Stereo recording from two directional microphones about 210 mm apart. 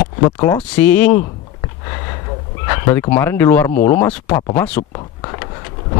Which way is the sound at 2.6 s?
15° left (ahead or behind).